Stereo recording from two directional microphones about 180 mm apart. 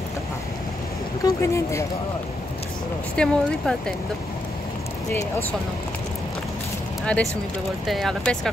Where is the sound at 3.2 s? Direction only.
5° left (ahead or behind).